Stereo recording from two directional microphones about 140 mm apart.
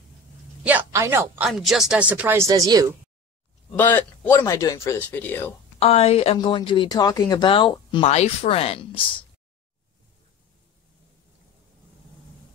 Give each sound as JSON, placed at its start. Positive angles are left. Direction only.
{"t": 0.7, "sound": "a woman's voice", "side_deg": -15}
{"t": 1.4, "sound": "speech", "side_deg": 0}
{"t": 3.7, "sound": "speech", "side_deg": 10}
{"t": 5.8, "sound": "speech", "side_deg": 45}
{"t": 6.3, "sound": "speech", "side_deg": 35}
{"t": 8.1, "sound": "speech", "side_deg": 45}